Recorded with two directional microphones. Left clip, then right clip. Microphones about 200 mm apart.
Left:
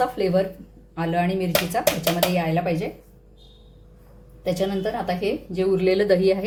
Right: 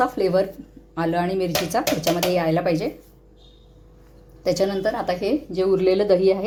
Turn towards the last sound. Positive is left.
turn(degrees=-15)  # may be behind; listen again after turning